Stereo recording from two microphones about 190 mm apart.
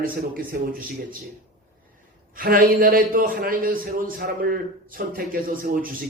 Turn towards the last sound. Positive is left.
turn(degrees=-50)  # may be behind; listen again after turning